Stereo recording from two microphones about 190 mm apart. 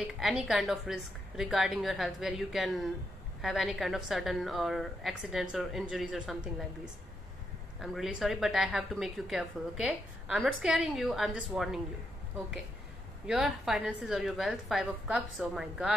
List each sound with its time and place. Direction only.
0.0 s a woman's voice: centre (ahead or behind)
7.8 s a woman's voice: centre (ahead or behind)
13.3 s a woman's voice: 5° right (ahead or behind)